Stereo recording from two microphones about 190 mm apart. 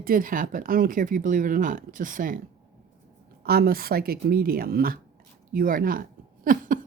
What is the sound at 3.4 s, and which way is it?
Speech, 55° right (ahead or behind).